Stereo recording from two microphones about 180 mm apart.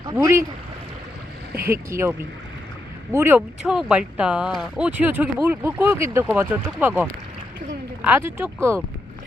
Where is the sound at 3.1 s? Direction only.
10° right (ahead or behind).